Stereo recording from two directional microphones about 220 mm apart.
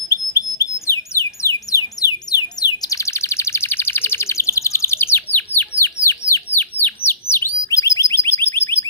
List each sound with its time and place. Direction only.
0.1 s bird: 15° left (ahead or behind)